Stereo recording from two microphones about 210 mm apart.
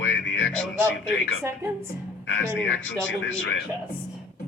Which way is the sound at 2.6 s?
65° left (ahead or behind).